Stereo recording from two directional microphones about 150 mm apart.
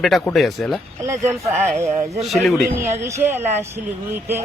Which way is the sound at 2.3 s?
Centre (ahead or behind).